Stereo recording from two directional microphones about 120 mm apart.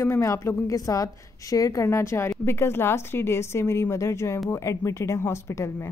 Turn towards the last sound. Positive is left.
turn(degrees=25)  # may be behind; listen again after turning